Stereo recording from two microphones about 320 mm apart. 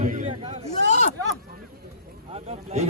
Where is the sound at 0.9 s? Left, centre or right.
Left.